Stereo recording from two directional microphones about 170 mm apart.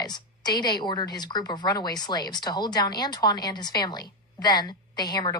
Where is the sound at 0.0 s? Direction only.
25° left (ahead or behind).